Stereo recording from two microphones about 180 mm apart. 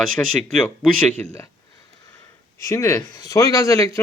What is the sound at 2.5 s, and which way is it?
A man's voice, 15° left (ahead or behind).